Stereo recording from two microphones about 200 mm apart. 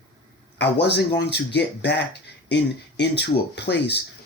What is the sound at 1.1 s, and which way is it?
Speech, 55° left (ahead or behind).